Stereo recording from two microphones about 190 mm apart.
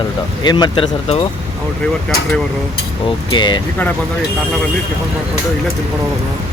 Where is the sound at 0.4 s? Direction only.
25° left (ahead or behind).